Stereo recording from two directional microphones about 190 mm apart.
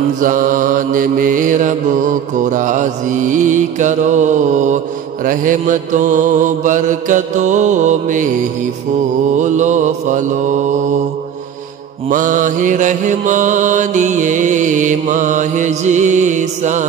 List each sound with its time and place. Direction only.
0.2 s mantra: 45° right (ahead or behind)
9.4 s mantra: 40° right (ahead or behind)
12.1 s mantra: 40° right (ahead or behind)